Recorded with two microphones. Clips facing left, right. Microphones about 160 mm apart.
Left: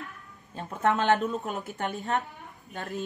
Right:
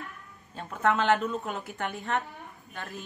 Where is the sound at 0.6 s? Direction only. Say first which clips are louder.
Even; 25° left (ahead or behind).